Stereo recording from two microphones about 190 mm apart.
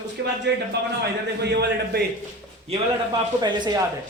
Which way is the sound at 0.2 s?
70° right (ahead or behind).